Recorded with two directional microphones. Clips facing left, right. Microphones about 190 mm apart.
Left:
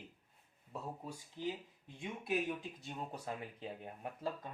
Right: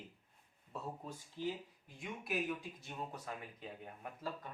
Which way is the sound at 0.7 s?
15° left (ahead or behind).